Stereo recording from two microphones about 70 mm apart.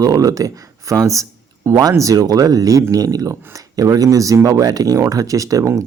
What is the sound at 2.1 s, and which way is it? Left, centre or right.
Speech, right.